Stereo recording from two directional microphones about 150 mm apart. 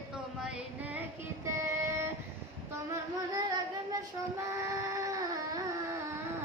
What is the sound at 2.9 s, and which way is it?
Music, 25° right (ahead or behind).